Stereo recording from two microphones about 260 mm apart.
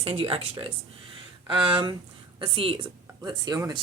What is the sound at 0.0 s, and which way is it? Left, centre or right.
A woman's voice, right.